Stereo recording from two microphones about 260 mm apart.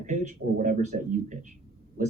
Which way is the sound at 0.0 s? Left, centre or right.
Right.